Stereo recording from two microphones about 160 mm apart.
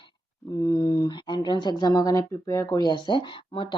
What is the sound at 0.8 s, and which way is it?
Speech, 25° left (ahead or behind).